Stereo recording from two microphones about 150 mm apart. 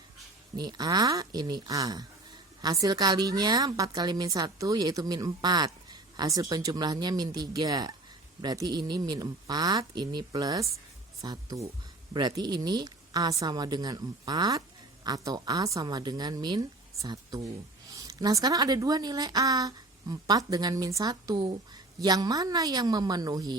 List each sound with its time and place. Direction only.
0.5 s a woman's voice: 25° right (ahead or behind)